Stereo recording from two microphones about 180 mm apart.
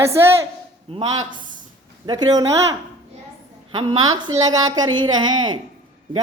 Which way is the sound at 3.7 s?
25° right (ahead or behind).